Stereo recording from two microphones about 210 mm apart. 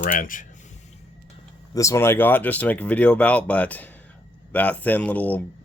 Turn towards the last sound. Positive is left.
turn(degrees=10)  # may be behind; listen again after turning